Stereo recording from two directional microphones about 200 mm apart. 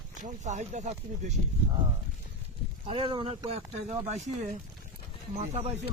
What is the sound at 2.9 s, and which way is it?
Speech, 25° right (ahead or behind).